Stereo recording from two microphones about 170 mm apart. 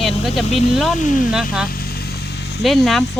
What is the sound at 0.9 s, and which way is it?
Speech, 50° left (ahead or behind).